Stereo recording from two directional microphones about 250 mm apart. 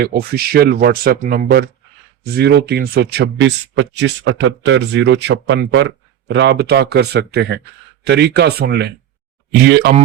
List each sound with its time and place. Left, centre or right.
0.0 s speech: right